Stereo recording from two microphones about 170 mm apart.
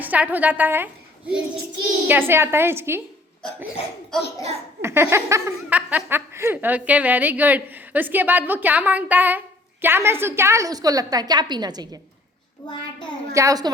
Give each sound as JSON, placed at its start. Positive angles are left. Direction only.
{"t": 0.0, "sound": "a woman's voice", "side_deg": -10}
{"t": 2.0, "sound": "a woman's voice", "side_deg": -15}
{"t": 4.8, "sound": "a woman's voice", "side_deg": -15}
{"t": 12.6, "sound": "a child's voice", "side_deg": 25}
{"t": 13.3, "sound": "a woman's voice", "side_deg": -20}